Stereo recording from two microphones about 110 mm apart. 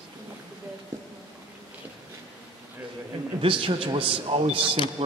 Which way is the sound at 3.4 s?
55° right (ahead or behind).